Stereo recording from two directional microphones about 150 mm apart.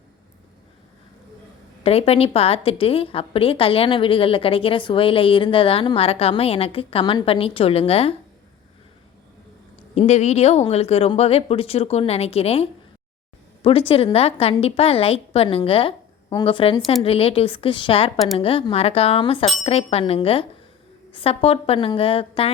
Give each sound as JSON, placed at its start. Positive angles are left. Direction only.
{"t": 1.8, "sound": "a woman's voice", "side_deg": 40}
{"t": 9.9, "sound": "a woman's voice", "side_deg": 45}